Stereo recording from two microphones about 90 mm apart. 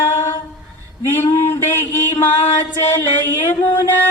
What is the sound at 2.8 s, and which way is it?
Music, 25° left (ahead or behind).